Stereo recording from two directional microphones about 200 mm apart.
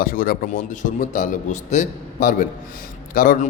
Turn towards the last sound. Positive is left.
turn(degrees=45)  # may be behind; listen again after turning